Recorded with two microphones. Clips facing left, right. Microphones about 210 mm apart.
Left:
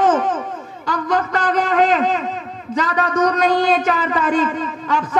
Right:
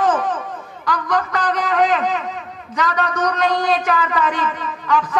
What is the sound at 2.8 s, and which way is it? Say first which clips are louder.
Speech: left 3 dB; 30° left (ahead or behind).